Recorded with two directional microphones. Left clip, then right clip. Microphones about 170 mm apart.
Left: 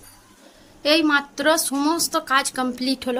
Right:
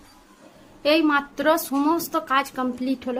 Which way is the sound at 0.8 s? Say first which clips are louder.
Left 1 dB; centre (ahead or behind).